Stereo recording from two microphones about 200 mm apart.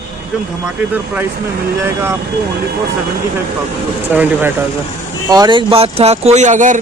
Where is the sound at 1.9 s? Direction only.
10° right (ahead or behind).